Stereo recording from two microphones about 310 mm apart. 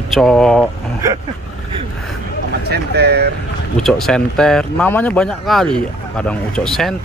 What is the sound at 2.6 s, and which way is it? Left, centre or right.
Speech, right.